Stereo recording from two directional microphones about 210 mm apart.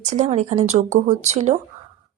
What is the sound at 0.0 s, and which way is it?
Speech, 35° right (ahead or behind).